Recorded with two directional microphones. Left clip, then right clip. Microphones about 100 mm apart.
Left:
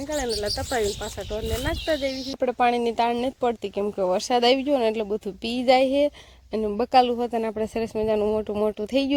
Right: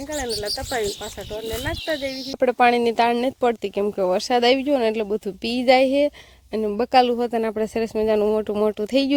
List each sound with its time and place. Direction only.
0.4 s speech: centre (ahead or behind)
1.5 s speech: 15° left (ahead or behind)
2.6 s speech: 60° right (ahead or behind)
4.2 s a woman's voice: 25° right (ahead or behind)
5.0 s a woman's voice: 45° right (ahead or behind)